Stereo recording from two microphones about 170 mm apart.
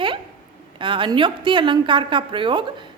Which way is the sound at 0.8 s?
30° right (ahead or behind).